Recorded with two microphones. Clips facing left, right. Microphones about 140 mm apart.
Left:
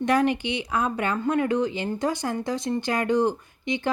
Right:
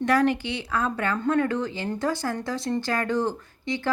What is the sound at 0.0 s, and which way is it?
Speech, 20° left (ahead or behind).